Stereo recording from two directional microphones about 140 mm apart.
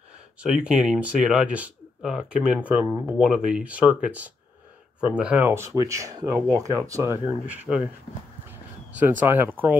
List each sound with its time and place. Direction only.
0.4 s speech: 5° right (ahead or behind)
9.2 s speech: 15° right (ahead or behind)